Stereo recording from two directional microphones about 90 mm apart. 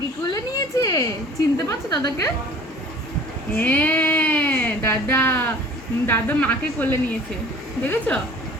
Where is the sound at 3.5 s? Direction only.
20° left (ahead or behind).